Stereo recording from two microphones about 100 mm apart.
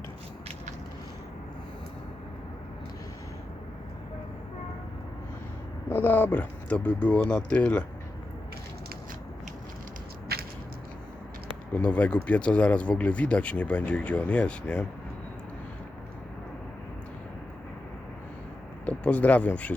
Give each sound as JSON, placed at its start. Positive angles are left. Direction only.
{"t": 5.9, "sound": "speech", "side_deg": 20}
{"t": 11.7, "sound": "speech", "side_deg": 15}
{"t": 18.9, "sound": "speech", "side_deg": 15}